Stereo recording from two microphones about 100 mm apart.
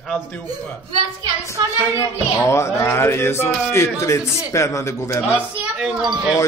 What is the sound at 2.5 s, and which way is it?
A man's voice, 25° left (ahead or behind).